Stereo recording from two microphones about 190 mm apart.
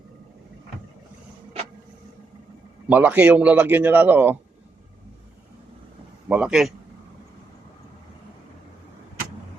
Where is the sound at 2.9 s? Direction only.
10° right (ahead or behind).